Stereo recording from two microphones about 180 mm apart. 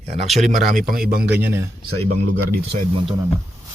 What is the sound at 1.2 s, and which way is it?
Speech, 10° right (ahead or behind).